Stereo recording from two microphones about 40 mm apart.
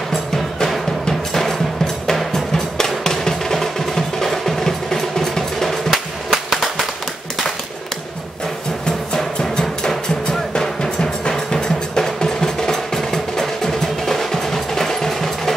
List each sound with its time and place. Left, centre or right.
0.1 s music: centre
8.8 s music: centre